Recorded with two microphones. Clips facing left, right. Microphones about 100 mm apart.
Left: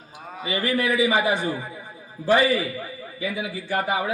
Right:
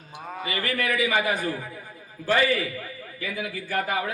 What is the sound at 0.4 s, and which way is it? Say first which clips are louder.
A man's voice: left 4 dB; 25° left (ahead or behind).